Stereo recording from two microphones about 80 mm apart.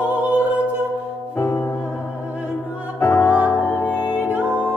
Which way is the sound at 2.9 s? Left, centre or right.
Left.